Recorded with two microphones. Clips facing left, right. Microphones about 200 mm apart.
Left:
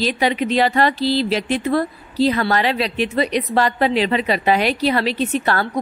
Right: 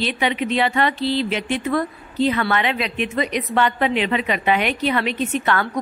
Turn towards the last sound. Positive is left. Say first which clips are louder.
# left 1 dB
turn(degrees=35)  # may be behind; listen again after turning